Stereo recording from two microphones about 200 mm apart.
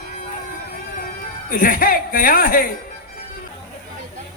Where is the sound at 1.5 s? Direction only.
45° left (ahead or behind).